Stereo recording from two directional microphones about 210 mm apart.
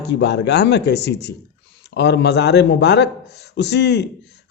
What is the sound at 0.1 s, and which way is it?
A man's voice, 55° left (ahead or behind).